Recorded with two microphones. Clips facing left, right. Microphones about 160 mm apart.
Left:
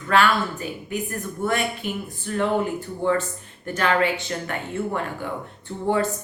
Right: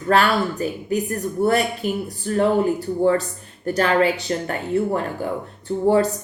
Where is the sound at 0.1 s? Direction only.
40° right (ahead or behind).